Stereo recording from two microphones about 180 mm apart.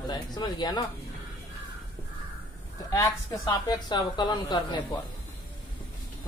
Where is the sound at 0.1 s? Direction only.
25° left (ahead or behind).